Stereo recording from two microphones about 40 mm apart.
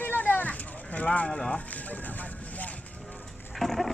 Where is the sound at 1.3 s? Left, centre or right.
Centre.